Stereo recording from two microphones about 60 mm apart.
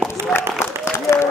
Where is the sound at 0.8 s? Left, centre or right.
Left.